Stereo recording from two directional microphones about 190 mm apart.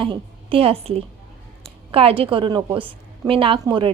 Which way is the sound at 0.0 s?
30° right (ahead or behind).